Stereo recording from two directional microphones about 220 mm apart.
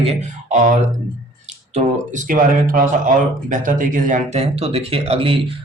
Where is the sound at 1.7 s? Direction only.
35° right (ahead or behind).